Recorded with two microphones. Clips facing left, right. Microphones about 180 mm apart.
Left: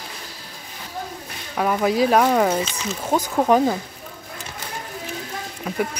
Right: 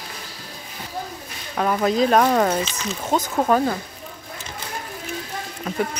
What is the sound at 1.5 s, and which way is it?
Speech, 5° left (ahead or behind).